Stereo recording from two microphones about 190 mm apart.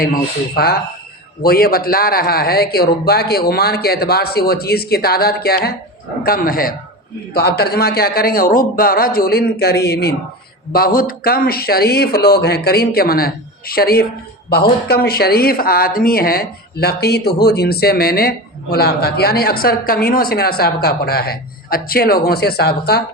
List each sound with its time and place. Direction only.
0.0 s a man's voice: 50° left (ahead or behind)